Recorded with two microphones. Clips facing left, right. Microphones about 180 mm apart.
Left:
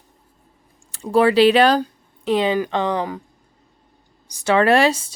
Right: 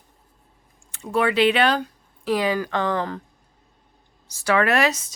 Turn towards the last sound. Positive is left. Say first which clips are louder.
# left 5 dB
turn(degrees=30)  # may be behind; listen again after turning